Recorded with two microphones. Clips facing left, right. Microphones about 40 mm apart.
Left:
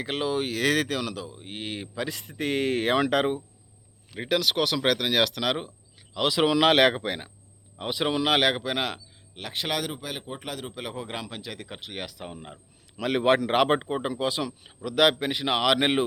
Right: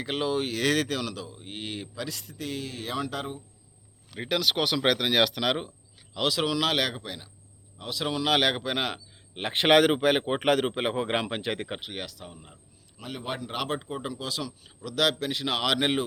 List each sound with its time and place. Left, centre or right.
0.0 s speech: centre
2.0 s speech: left
4.2 s speech: centre; by 7.3 s left
7.8 s speech: left; by 9.0 s centre
9.3 s speech: right
11.9 s speech: centre
12.2 s speech: left
13.0 s a man's voice: left; by 16.0 s centre